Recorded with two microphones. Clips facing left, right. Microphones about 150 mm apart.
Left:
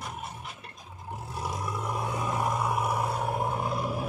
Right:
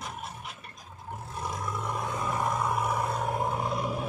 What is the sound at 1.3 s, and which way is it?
Vehicle, 10° left (ahead or behind).